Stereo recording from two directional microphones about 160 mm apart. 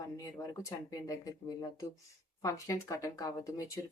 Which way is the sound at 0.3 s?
20° left (ahead or behind).